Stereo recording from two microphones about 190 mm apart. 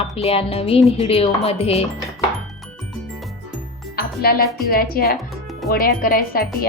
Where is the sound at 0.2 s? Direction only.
30° left (ahead or behind).